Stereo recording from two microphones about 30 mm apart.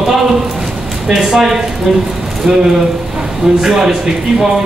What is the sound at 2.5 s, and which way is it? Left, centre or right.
Speech, right.